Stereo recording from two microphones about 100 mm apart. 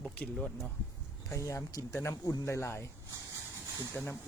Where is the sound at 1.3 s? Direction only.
30° left (ahead or behind).